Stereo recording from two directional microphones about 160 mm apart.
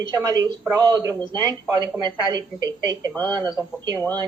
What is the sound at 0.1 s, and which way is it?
Speech, 25° right (ahead or behind).